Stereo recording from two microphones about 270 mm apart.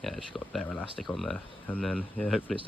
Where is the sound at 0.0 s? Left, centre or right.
Centre.